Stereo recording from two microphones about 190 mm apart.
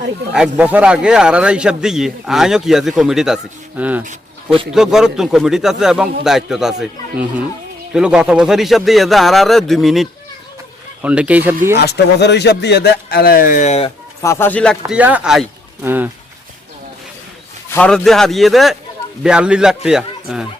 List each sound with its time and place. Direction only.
0.3 s a man's voice: 5° right (ahead or behind)
11.8 s speech: 60° left (ahead or behind); by 13.9 s 35° left (ahead or behind)
14.2 s speech: 15° left (ahead or behind)
14.9 s speech: 5° right (ahead or behind)
17.7 s a man's voice: 5° left (ahead or behind)